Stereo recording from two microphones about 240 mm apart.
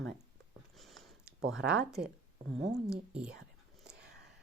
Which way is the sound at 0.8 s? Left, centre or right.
Centre.